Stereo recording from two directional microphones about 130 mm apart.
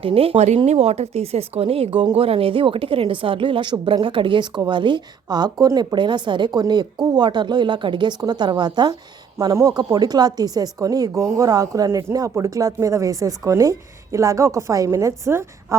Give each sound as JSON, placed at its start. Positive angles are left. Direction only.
{"t": 0.0, "sound": "a woman's voice", "side_deg": -45}